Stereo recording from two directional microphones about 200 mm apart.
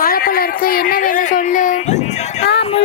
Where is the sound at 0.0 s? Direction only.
45° left (ahead or behind).